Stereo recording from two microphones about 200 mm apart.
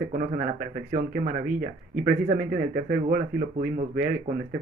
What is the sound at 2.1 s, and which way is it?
Speech, 45° right (ahead or behind).